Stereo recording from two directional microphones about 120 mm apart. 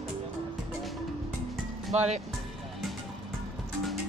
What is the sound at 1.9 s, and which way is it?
Speech, 65° right (ahead or behind).